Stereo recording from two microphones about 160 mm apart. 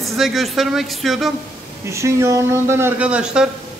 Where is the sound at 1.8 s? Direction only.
15° right (ahead or behind).